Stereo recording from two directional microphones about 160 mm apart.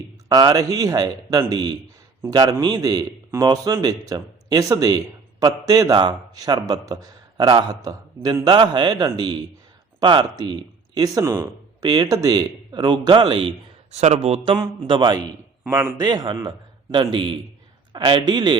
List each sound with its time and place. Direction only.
0.3 s a man's voice: 25° right (ahead or behind)
13.9 s speech: 40° right (ahead or behind)
15.6 s a man's voice: 15° right (ahead or behind)